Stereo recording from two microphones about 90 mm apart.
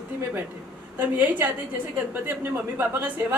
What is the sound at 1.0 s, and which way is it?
Speech, 20° right (ahead or behind).